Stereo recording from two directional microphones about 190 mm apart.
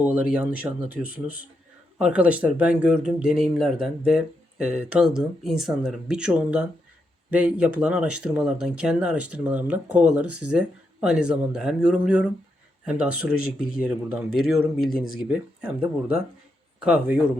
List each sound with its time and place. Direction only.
0.0 s speech: 5° right (ahead or behind)